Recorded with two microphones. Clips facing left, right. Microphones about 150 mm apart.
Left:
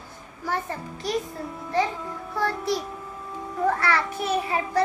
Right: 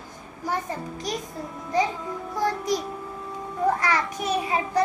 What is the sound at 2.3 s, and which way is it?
Speech, 15° right (ahead or behind).